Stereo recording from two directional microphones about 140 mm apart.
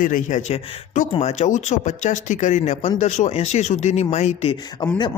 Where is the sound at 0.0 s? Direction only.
65° left (ahead or behind).